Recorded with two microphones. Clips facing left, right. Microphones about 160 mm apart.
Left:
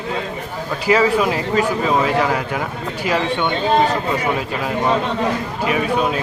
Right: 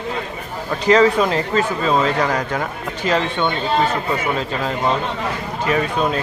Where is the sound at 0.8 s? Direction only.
10° left (ahead or behind).